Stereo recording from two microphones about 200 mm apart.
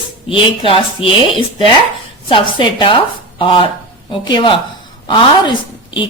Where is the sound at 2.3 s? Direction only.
25° left (ahead or behind).